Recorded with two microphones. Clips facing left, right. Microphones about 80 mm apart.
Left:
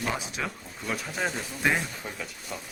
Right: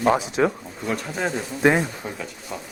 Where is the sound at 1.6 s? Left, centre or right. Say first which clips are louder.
Right 8 dB; right.